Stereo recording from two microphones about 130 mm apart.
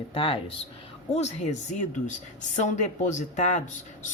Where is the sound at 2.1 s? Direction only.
70° left (ahead or behind).